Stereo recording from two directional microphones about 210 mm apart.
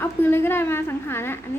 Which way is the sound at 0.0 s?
10° left (ahead or behind).